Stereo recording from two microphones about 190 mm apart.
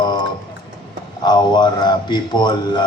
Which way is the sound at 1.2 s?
25° left (ahead or behind).